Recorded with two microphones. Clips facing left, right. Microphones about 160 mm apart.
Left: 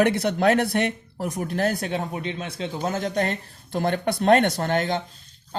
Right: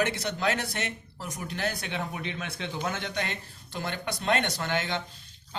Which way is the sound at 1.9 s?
30° left (ahead or behind).